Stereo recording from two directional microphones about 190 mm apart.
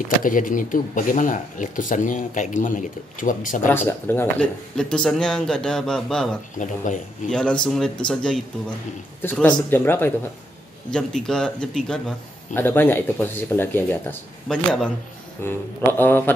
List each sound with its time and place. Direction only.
0.2 s speech: 45° left (ahead or behind)
3.6 s speech: 10° left (ahead or behind)
6.6 s speech: 40° left (ahead or behind)
7.2 s speech: 5° left (ahead or behind)